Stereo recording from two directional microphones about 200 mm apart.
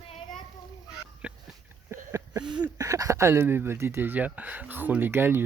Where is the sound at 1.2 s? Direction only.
5° right (ahead or behind).